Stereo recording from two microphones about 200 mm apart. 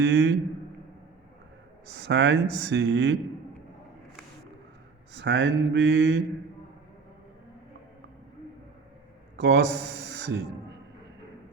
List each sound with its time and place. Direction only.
0.0 s a man's voice: 65° right (ahead or behind)
2.0 s speech: 60° right (ahead or behind)
5.1 s speech: 60° right (ahead or behind)
9.3 s a man's voice: 60° right (ahead or behind)